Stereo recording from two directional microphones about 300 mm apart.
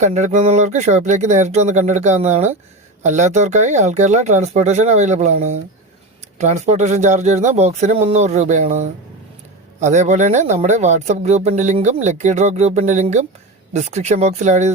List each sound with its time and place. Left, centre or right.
0.0 s speech: right